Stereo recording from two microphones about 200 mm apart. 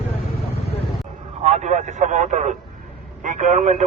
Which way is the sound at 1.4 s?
35° right (ahead or behind).